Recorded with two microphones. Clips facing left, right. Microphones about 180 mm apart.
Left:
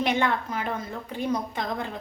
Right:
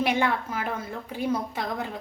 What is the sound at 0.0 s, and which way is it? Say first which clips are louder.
A woman's voice: even; 10° right (ahead or behind).